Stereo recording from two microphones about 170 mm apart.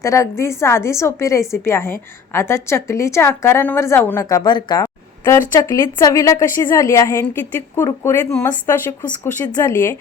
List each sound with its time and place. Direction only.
0.0 s a woman's voice: 15° left (ahead or behind)